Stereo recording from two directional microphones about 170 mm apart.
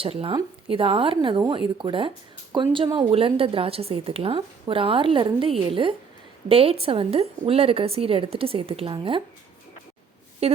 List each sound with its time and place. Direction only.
0.0 s speech: 35° right (ahead or behind)
10.4 s speech: 35° right (ahead or behind)